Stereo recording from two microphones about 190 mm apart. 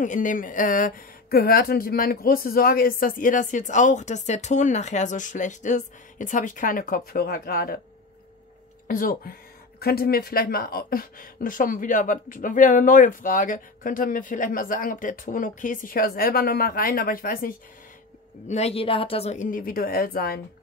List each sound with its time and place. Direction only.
0.0 s speech: 40° left (ahead or behind)
8.8 s speech: 50° left (ahead or behind)
18.5 s a woman's voice: 35° left (ahead or behind); by 20.3 s 50° left (ahead or behind)